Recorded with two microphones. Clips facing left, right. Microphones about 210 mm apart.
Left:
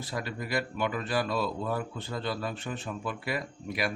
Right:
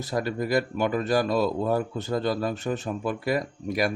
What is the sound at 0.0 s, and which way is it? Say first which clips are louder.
Speech: right 8 dB; 40° right (ahead or behind).